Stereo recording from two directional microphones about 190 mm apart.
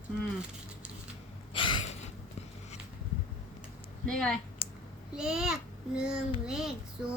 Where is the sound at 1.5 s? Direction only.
25° left (ahead or behind).